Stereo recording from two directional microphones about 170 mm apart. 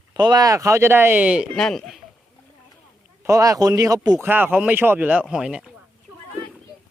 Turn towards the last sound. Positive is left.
turn(degrees=-5)  # may be behind; listen again after turning